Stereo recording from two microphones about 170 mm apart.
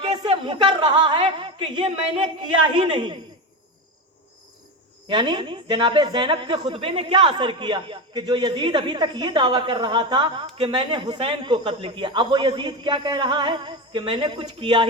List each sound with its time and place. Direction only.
0.0 s a woman's voice: 25° right (ahead or behind)
5.0 s a woman's voice: 30° right (ahead or behind)